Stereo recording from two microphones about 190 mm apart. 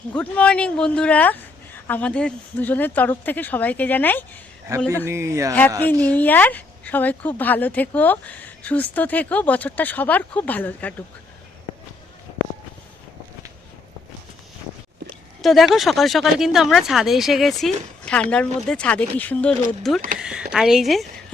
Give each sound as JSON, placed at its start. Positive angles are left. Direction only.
{"t": 0.1, "sound": "a woman's voice", "side_deg": 5}
{"t": 4.7, "sound": "speech", "side_deg": -15}
{"t": 5.8, "sound": "a woman's voice", "side_deg": 10}
{"t": 15.4, "sound": "a woman's voice", "side_deg": 0}
{"t": 20.1, "sound": "speech", "side_deg": -5}